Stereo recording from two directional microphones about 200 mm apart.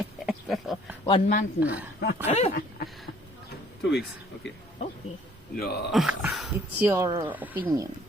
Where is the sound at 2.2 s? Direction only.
35° left (ahead or behind).